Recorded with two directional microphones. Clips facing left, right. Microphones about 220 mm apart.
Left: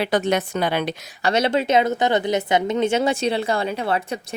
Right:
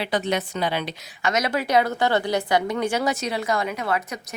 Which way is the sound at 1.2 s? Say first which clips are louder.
Left 4 dB; 30° left (ahead or behind).